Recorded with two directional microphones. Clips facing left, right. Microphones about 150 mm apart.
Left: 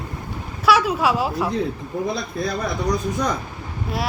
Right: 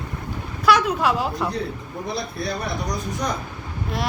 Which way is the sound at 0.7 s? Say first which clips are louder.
Left 1 dB; 5° left (ahead or behind).